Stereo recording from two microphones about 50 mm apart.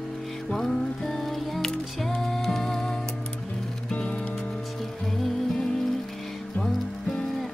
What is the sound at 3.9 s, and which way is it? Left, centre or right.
Music, left.